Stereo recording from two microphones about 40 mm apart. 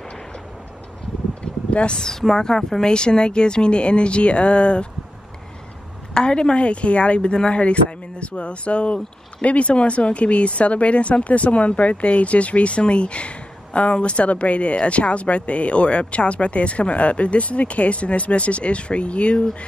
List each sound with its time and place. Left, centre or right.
1.4 s a sound: left
2.0 s a woman's voice: centre; by 4.8 s left
6.1 s a woman's voice: left